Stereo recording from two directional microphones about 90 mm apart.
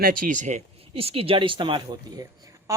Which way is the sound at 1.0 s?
90° right.